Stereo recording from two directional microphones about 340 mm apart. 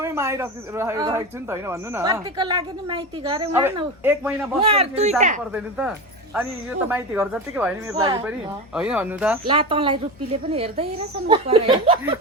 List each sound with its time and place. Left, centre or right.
0.0 s a woman's voice: centre
4.6 s a woman's voice: centre
5.5 s speech: centre
9.5 s a woman's voice: centre